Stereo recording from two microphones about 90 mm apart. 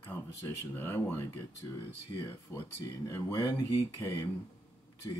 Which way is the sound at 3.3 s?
40° left (ahead or behind).